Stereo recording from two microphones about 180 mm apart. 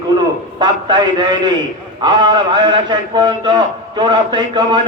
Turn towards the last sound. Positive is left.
turn(degrees=-25)  # may be behind; listen again after turning